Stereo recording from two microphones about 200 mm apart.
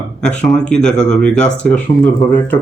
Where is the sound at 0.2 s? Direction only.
5° left (ahead or behind).